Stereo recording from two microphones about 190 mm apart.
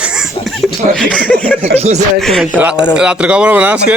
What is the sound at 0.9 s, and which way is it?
Speech, 5° left (ahead or behind).